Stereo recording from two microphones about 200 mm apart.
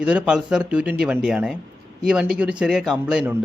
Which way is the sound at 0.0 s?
5° right (ahead or behind).